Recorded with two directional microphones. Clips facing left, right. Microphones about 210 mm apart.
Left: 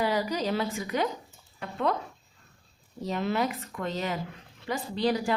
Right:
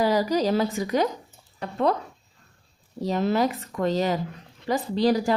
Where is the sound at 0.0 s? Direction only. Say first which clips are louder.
Right 6 dB; 40° right (ahead or behind).